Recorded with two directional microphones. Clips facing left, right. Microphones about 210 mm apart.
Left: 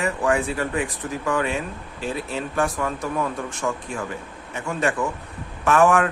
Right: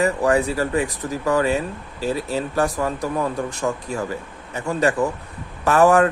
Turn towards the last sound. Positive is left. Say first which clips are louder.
# right 3 dB
turn(degrees=-35)  # may be behind; listen again after turning